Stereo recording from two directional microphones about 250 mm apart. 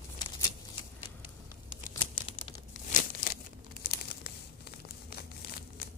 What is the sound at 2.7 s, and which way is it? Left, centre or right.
Crumpling, left.